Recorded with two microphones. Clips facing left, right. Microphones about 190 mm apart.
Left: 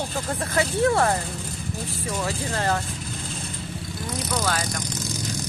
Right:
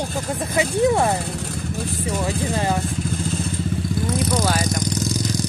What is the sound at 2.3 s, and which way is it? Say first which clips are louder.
Speech: right 2 dB; 15° right (ahead or behind).